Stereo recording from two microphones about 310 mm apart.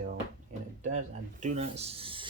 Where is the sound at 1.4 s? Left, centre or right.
Right.